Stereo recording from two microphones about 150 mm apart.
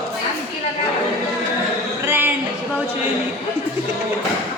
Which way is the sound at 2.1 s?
15° right (ahead or behind).